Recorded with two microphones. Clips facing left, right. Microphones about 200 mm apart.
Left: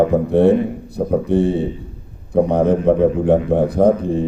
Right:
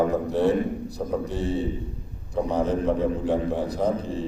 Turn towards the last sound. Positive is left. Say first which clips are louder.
# left 10 dB
turn(degrees=55)  # may be behind; listen again after turning